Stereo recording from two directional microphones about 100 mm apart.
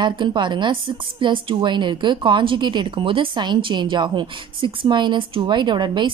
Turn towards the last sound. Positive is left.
turn(degrees=-50)  # may be behind; listen again after turning